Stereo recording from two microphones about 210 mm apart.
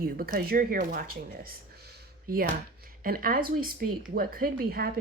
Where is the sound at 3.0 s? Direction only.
45° right (ahead or behind).